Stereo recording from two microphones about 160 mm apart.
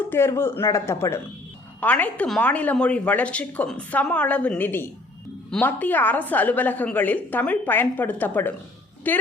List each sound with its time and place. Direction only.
0.1 s a woman's voice: 15° left (ahead or behind)